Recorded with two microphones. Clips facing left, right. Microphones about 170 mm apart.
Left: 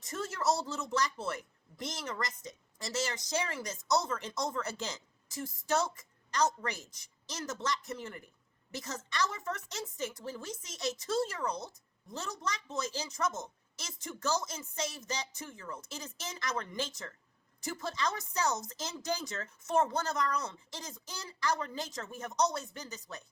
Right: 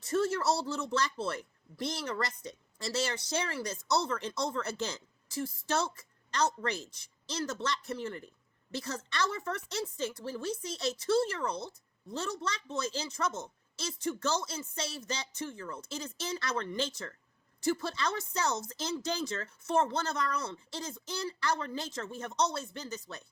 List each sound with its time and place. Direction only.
0.0 s speech: 20° left (ahead or behind)